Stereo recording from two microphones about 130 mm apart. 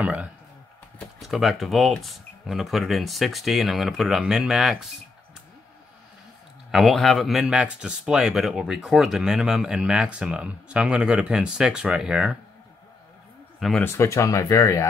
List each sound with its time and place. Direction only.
0.0 s speech: 10° right (ahead or behind)
1.2 s speech: centre (ahead or behind)
6.7 s speech: centre (ahead or behind)
13.6 s speech: centre (ahead or behind)
13.8 s speech: 20° left (ahead or behind)